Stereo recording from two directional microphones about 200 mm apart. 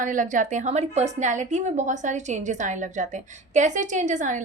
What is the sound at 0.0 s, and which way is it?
A woman's voice, 40° right (ahead or behind).